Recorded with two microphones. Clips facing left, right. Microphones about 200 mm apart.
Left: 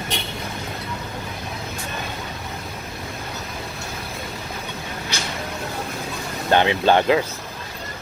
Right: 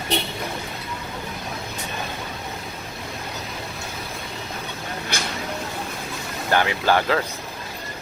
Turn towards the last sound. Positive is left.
turn(degrees=20)  # may be behind; listen again after turning